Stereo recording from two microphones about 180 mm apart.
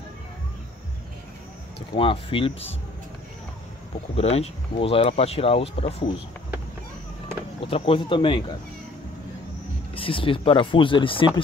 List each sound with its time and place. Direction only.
2.0 s speech: 30° left (ahead or behind)
4.2 s speech: 35° left (ahead or behind)
7.6 s speech: 30° left (ahead or behind)
9.9 s speech: 30° left (ahead or behind)